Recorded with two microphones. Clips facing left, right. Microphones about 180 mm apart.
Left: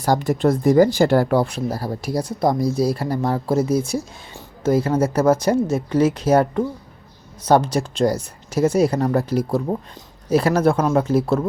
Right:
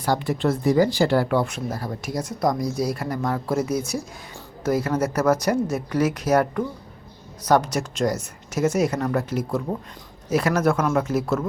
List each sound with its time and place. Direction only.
0.0 s a woman's voice: 45° left (ahead or behind)